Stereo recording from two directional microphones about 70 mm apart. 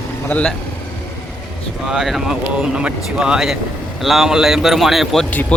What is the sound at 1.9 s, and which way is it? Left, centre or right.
Speech, centre.